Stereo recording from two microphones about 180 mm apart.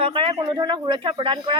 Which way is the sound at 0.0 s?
30° right (ahead or behind).